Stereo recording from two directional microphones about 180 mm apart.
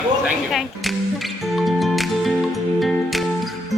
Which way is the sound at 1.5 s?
Centre (ahead or behind).